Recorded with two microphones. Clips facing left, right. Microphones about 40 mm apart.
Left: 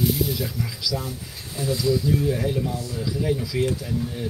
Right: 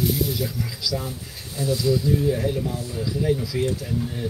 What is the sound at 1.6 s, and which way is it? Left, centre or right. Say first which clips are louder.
Speech: right 1 dB; left.